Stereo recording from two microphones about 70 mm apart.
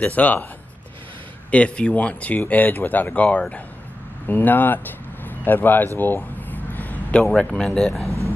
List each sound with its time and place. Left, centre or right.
0.0 s speech: left
1.5 s speech: centre
5.9 s a sound: left
7.2 s speech: centre